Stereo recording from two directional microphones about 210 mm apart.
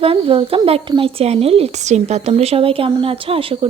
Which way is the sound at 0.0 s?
25° right (ahead or behind).